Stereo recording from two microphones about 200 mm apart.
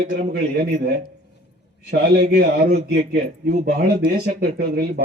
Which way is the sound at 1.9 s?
55° right (ahead or behind).